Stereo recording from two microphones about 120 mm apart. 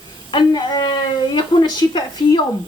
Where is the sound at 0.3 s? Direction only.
35° left (ahead or behind).